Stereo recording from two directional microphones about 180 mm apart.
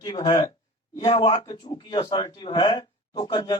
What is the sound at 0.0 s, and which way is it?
Speech, 25° left (ahead or behind).